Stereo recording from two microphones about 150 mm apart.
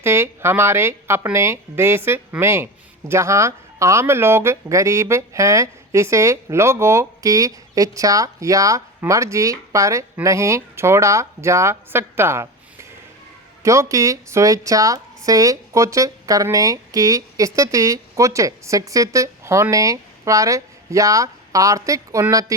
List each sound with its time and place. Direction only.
0.0 s a woman's voice: 15° right (ahead or behind)
13.6 s a woman's voice: 20° right (ahead or behind)